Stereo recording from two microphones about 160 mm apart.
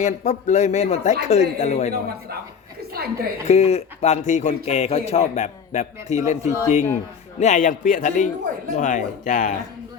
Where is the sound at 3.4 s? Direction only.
40° left (ahead or behind).